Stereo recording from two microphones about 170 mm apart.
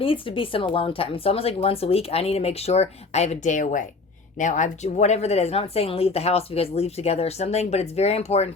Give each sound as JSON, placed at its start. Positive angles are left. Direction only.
{"t": 0.0, "sound": "speech", "side_deg": 30}